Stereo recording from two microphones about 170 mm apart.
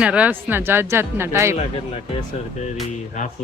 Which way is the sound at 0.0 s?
5° right (ahead or behind).